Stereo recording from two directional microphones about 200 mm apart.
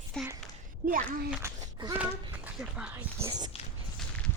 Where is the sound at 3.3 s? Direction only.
20° right (ahead or behind).